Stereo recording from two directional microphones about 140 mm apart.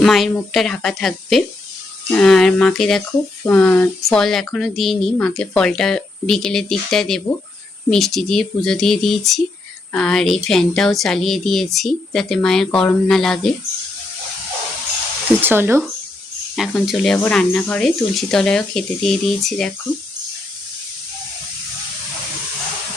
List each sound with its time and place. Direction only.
0.0 s speech: centre (ahead or behind)
15.4 s speech: 15° right (ahead or behind)
16.6 s speech: centre (ahead or behind)